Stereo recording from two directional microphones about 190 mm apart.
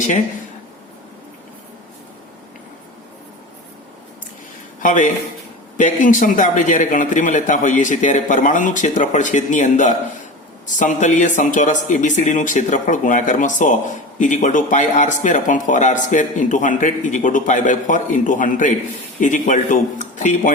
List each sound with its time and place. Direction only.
4.8 s a man's voice: 40° left (ahead or behind)